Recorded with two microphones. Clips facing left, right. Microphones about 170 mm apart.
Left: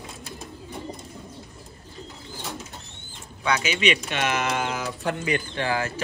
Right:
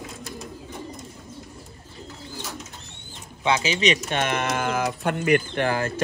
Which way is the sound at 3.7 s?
35° right (ahead or behind).